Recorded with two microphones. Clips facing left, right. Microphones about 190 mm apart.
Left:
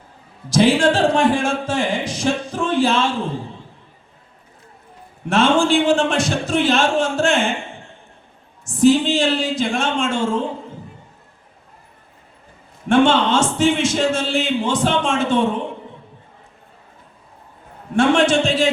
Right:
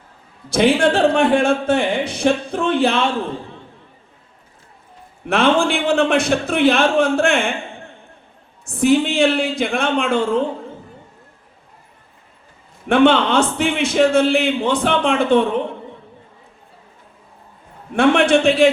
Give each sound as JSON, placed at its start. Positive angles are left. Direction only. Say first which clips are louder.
{"t": 0.5, "sound": "speech", "louder": "even", "side_deg": -60}
{"t": 5.3, "sound": "speech", "louder": "left 1 dB", "side_deg": -60}
{"t": 8.6, "sound": "speech", "louder": "left 1 dB", "side_deg": -60}
{"t": 12.9, "sound": "speech", "louder": "right 1 dB", "side_deg": -60}
{"t": 17.9, "sound": "speech", "louder": "right 1 dB", "side_deg": -60}